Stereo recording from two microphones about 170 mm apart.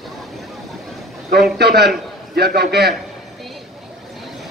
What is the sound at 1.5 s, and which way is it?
A man's voice, 70° right (ahead or behind).